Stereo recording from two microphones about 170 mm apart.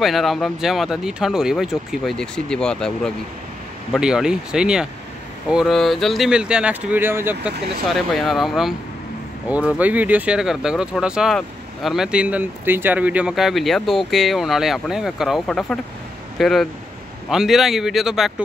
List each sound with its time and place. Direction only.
0.0 s speech: centre (ahead or behind)
7.5 s speech: 70° right (ahead or behind)
7.9 s speech: centre (ahead or behind)